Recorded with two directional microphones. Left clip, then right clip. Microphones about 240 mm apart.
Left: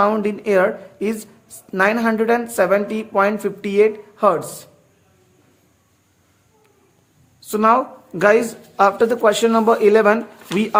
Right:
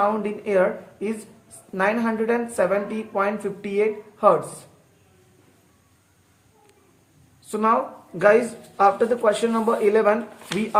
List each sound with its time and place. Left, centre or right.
0.0 s speech: left
7.5 s speech: left